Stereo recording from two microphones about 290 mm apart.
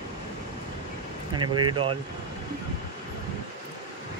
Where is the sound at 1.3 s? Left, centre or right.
Centre.